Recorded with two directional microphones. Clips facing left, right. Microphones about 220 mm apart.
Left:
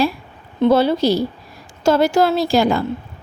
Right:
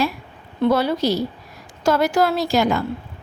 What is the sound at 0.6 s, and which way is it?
A woman's voice, 25° left (ahead or behind).